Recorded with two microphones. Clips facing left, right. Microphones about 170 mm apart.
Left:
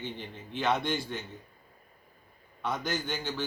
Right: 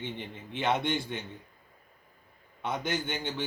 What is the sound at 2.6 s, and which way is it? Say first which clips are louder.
Speech: right 1 dB; 20° right (ahead or behind).